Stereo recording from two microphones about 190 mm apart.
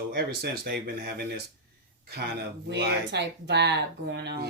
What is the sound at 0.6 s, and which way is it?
Speech, 55° right (ahead or behind).